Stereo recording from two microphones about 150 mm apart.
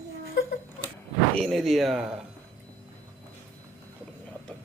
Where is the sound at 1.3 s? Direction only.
Centre (ahead or behind).